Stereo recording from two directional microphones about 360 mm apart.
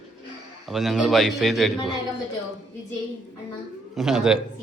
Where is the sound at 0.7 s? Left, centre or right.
Centre.